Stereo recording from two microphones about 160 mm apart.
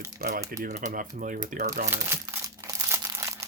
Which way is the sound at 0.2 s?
75° right (ahead or behind).